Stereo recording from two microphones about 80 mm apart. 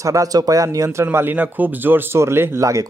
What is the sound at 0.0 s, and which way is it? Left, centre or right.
Speech, right.